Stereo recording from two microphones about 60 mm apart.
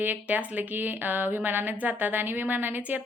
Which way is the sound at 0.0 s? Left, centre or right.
Right.